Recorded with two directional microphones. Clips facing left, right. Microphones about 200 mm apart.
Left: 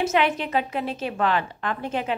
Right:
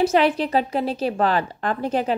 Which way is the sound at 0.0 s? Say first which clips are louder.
Right 4 dB; 35° right (ahead or behind).